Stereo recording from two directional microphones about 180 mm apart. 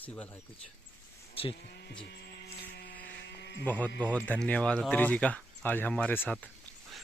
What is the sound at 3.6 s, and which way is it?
Speech, 10° left (ahead or behind).